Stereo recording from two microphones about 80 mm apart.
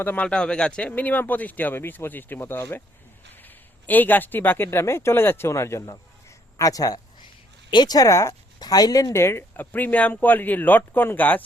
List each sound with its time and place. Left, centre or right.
0.0 s speech: left
0.3 s speech: centre; by 7.0 s left
7.7 s speech: left
7.9 s speech: left
8.5 s speech: left
9.1 s speech: left